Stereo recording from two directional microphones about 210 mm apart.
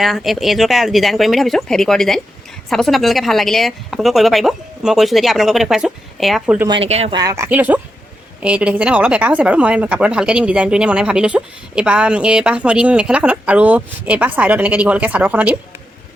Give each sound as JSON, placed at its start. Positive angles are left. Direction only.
{"t": 0.0, "sound": "speech", "side_deg": 0}
{"t": 6.7, "sound": "speech", "side_deg": -30}
{"t": 7.2, "sound": "speech", "side_deg": -15}